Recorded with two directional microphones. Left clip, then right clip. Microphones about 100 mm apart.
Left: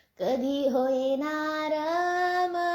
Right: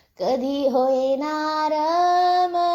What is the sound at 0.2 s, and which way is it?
Child singing, 20° right (ahead or behind).